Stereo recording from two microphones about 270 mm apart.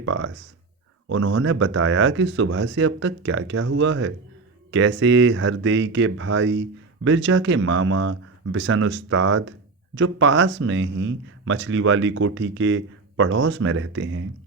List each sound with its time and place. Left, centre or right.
0.0 s speech: right